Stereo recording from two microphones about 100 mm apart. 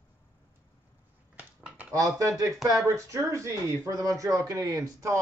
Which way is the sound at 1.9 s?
35° right (ahead or behind).